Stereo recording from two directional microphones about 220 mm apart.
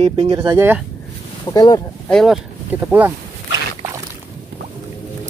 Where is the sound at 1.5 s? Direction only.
20° left (ahead or behind).